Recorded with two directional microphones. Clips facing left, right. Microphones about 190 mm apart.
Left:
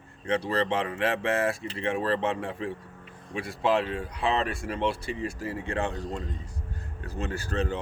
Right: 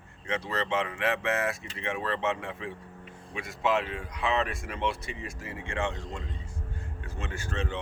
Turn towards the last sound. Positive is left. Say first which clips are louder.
# left 5 dB
turn(degrees=35)  # may be behind; listen again after turning